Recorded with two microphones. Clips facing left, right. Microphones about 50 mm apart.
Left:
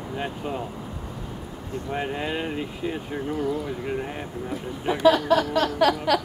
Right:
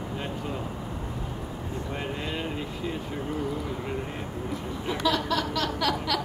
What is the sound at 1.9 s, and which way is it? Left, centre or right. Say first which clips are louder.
Speech: left 6 dB; left.